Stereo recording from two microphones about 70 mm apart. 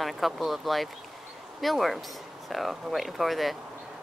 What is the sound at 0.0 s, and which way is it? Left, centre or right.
Speech, centre.